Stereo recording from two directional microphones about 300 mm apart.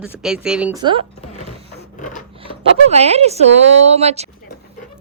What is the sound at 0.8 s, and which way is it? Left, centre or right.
Speech, centre.